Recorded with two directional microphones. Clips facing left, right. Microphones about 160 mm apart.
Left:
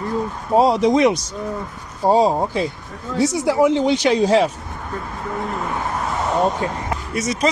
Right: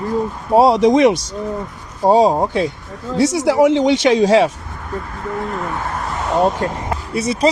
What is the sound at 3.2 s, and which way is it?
Speech, 90° right.